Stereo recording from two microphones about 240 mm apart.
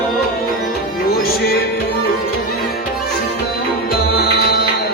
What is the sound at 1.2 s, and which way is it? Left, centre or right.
Music, left.